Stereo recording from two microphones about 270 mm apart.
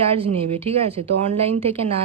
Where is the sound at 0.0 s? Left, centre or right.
Right.